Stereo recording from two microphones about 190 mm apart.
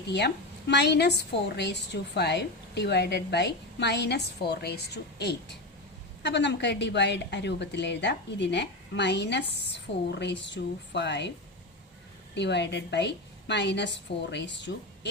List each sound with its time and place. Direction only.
0.1 s a woman's voice: 60° left (ahead or behind)
12.3 s a woman's voice: 65° left (ahead or behind)